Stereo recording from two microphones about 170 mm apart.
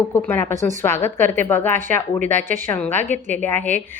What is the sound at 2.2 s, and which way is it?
Speech, 50° right (ahead or behind).